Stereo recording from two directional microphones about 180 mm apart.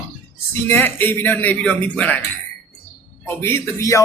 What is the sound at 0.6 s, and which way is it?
Speech, 10° left (ahead or behind).